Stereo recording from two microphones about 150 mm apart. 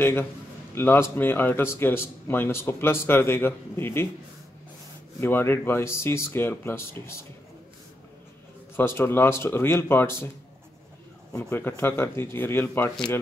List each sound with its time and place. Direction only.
0.0 s speech: 15° left (ahead or behind)
5.2 s speech: 15° left (ahead or behind)
8.7 s speech: 15° left (ahead or behind)
11.3 s speech: 15° left (ahead or behind)